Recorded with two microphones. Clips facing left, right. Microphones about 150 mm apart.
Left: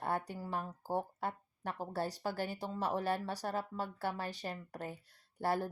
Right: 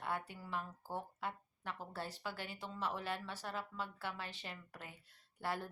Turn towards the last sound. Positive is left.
turn(degrees=40)  # may be behind; listen again after turning